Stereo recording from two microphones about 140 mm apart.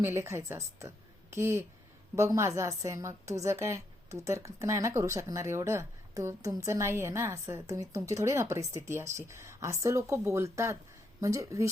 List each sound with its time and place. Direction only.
0.0 s a woman's voice: 20° right (ahead or behind)